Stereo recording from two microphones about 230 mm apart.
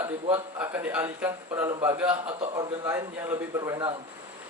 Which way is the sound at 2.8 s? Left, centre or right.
Centre.